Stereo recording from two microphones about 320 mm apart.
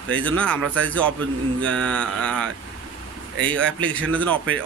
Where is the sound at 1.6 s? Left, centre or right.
Centre.